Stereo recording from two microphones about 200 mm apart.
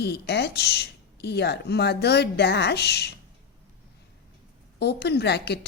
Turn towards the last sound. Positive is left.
turn(degrees=55)  # may be behind; listen again after turning